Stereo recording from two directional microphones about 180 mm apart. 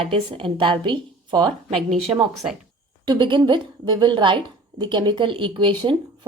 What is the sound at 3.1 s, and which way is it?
A woman's voice, 25° right (ahead or behind).